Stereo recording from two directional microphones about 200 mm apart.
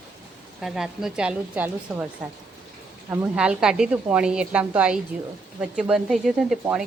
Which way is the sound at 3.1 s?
10° right (ahead or behind).